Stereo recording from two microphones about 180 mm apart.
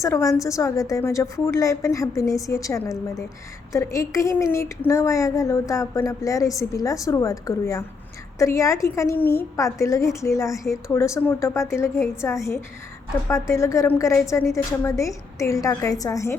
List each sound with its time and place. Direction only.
0.0 s a woman's voice: 15° left (ahead or behind)